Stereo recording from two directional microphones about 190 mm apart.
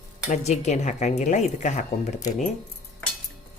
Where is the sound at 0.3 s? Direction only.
35° left (ahead or behind).